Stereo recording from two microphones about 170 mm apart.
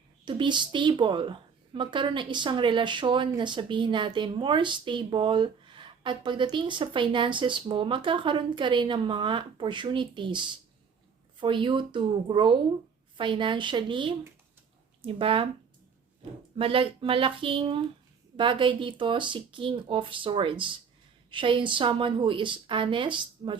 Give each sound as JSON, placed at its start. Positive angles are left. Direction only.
{"t": 0.3, "sound": "speech", "side_deg": -25}
{"t": 16.6, "sound": "speech", "side_deg": -30}